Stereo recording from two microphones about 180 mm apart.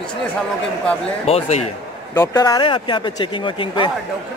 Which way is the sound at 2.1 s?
20° left (ahead or behind).